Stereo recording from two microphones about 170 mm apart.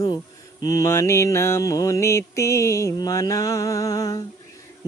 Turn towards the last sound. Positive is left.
turn(degrees=20)  # may be behind; listen again after turning